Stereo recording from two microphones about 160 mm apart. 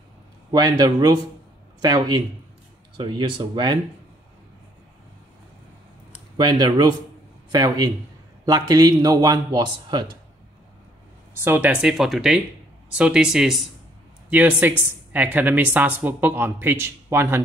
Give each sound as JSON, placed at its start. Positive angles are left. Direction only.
{"t": 0.5, "sound": "speech", "side_deg": -25}
{"t": 6.3, "sound": "speech", "side_deg": -25}
{"t": 11.4, "sound": "speech", "side_deg": -10}